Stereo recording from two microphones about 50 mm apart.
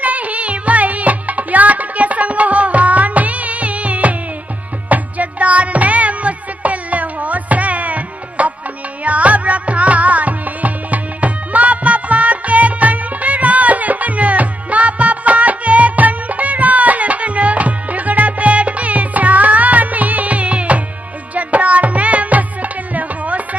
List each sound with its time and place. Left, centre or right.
0.0 s music: right